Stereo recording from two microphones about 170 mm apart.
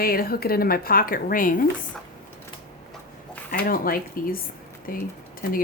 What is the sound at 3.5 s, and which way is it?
Speech, 55° left (ahead or behind).